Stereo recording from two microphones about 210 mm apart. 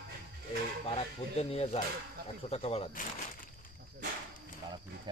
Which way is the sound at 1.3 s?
30° left (ahead or behind).